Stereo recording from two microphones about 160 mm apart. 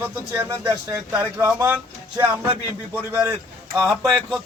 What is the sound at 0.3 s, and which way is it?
Speech, 15° right (ahead or behind).